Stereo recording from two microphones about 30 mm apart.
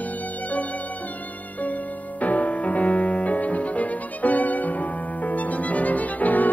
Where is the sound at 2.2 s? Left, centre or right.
Left.